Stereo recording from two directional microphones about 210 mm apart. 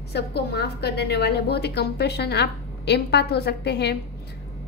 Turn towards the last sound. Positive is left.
turn(degrees=50)  # may be behind; listen again after turning